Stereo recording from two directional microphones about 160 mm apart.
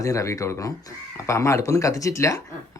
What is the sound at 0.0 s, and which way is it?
Speech, 20° left (ahead or behind).